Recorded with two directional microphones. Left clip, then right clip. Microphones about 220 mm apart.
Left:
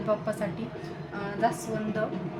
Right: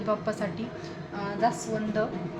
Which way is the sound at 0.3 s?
20° right (ahead or behind).